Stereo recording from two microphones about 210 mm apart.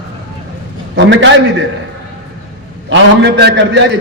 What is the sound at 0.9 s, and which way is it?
Speech, 60° right (ahead or behind).